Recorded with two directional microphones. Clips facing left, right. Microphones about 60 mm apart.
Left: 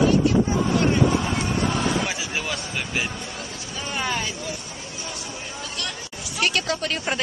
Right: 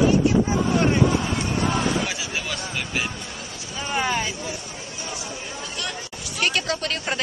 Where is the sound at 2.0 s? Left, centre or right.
Centre.